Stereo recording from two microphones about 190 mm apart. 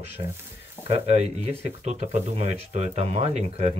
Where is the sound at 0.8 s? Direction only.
35° right (ahead or behind).